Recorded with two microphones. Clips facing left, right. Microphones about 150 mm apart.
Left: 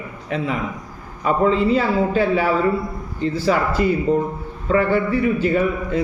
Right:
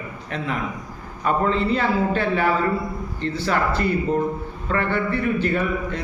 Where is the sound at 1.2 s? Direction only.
5° left (ahead or behind).